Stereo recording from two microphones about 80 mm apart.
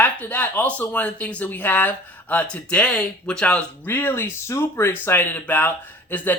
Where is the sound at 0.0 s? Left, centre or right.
Left.